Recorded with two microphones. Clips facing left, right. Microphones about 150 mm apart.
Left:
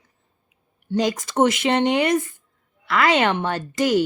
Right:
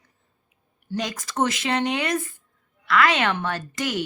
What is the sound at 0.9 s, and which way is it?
Speech, 25° left (ahead or behind).